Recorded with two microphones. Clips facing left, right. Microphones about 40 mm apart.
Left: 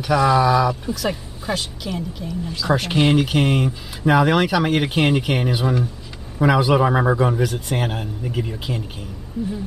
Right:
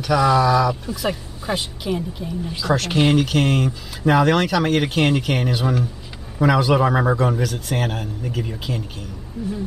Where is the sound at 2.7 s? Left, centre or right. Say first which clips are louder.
Even; centre.